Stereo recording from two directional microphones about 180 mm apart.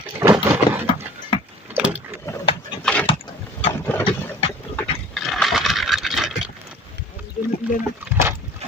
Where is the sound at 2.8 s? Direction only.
5° left (ahead or behind).